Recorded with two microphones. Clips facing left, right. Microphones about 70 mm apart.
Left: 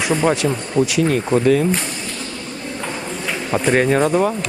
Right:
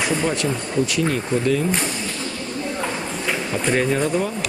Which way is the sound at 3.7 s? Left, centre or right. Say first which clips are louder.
Left 5 dB; left.